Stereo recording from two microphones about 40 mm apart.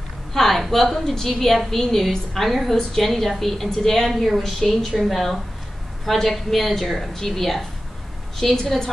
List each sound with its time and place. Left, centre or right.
0.3 s a woman's voice: centre